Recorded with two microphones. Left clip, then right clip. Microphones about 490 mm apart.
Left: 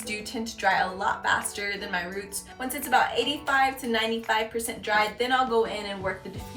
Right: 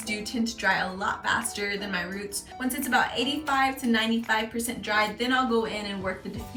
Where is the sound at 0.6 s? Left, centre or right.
Centre.